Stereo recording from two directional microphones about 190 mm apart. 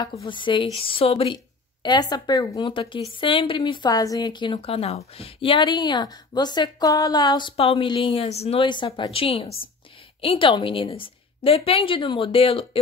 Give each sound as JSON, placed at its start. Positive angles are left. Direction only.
{"t": 0.2, "sound": "a woman's voice", "side_deg": 25}